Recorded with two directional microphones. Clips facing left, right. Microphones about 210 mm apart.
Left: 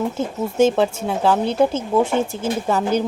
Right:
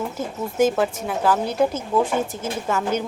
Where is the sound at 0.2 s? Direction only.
25° left (ahead or behind).